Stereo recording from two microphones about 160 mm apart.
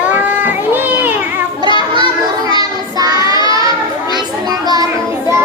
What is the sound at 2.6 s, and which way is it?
Child singing, 25° right (ahead or behind).